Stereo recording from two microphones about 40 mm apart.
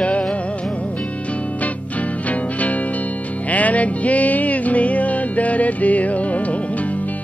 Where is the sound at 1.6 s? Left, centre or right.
Left.